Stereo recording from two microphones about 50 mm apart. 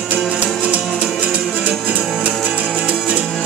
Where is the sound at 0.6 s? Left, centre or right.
Right.